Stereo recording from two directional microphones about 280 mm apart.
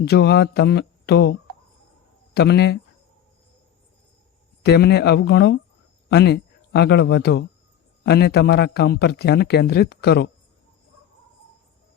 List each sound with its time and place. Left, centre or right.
0.0 s a man's voice: left
4.6 s a man's voice: left